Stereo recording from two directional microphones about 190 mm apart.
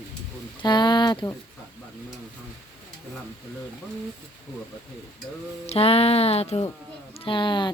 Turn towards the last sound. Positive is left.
turn(degrees=25)  # may be behind; listen again after turning